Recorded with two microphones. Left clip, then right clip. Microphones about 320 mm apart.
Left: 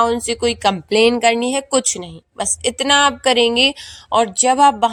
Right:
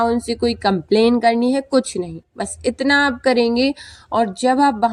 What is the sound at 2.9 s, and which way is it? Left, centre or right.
A woman's voice, centre.